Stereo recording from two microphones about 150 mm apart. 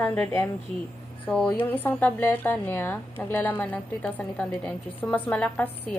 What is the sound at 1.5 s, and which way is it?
A woman's voice, 10° left (ahead or behind).